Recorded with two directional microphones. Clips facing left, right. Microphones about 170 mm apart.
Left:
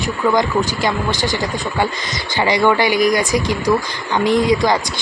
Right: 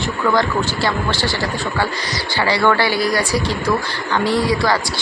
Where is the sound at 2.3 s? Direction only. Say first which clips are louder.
Left 2 dB; 20° left (ahead or behind).